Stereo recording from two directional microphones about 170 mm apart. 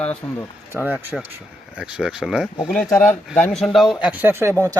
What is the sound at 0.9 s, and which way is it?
Speech, 10° right (ahead or behind).